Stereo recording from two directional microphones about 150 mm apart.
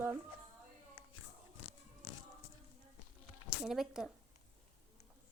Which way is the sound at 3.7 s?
5° right (ahead or behind).